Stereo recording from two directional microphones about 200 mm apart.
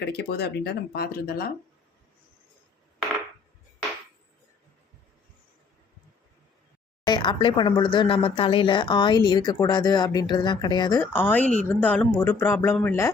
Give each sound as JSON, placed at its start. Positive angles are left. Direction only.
{"t": 0.0, "sound": "speech", "side_deg": 55}
{"t": 7.0, "sound": "speech", "side_deg": 20}